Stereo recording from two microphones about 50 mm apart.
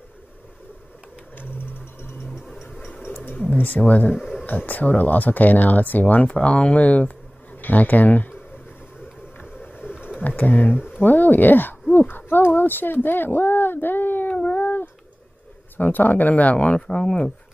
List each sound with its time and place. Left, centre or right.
1.3 s a sound: left
2.5 s music: centre
3.5 s speech: left
4.1 s a sound: centre
4.5 s speech: left
9.5 s vehicle: left
10.2 s speech: left
14.3 s a sound: left
15.8 s speech: left; by 17.3 s centre